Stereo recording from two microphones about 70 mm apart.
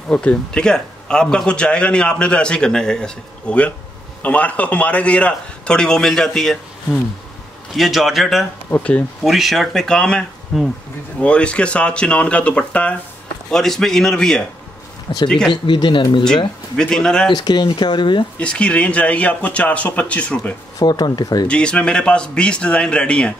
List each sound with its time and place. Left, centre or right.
0.1 s a man's voice: centre
8.6 s speech: left
9.2 s speech: centre
10.5 s speech: centre
11.2 s a man's voice: centre
15.5 s speech: left
16.7 s a man's voice: centre
17.3 s speech: left
18.4 s speech: centre
20.8 s speech: left
21.5 s a man's voice: centre